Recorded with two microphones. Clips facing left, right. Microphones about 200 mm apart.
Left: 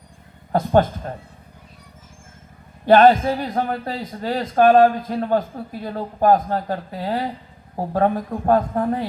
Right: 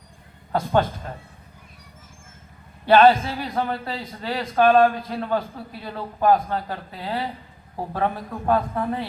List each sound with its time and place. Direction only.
0.5 s a man's voice: 45° left (ahead or behind)
2.8 s a man's voice: 45° left (ahead or behind)